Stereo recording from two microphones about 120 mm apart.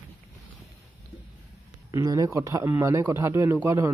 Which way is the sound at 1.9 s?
30° right (ahead or behind).